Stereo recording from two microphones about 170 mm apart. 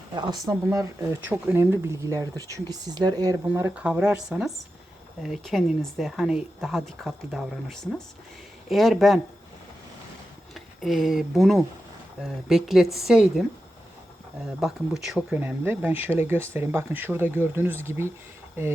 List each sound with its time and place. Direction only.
0.1 s speech: 25° right (ahead or behind)
3.4 s speech: 10° right (ahead or behind)
10.5 s speech: centre (ahead or behind)
15.0 s speech: 5° right (ahead or behind)